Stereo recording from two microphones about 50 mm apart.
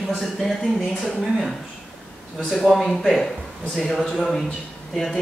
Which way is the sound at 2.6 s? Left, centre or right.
Centre.